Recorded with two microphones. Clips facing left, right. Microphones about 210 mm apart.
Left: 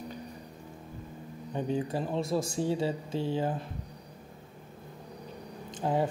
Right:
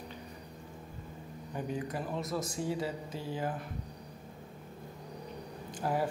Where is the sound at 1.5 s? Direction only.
30° left (ahead or behind).